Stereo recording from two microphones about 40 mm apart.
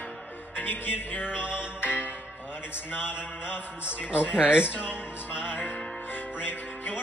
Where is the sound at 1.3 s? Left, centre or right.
Right.